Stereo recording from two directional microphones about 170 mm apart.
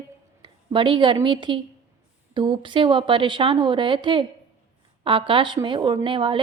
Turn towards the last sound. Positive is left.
turn(degrees=-30)  # may be behind; listen again after turning